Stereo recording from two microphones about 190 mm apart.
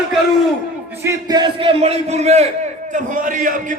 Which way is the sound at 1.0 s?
15° right (ahead or behind).